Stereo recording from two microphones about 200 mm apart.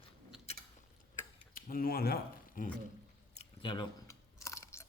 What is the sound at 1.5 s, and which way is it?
Speech, 45° left (ahead or behind).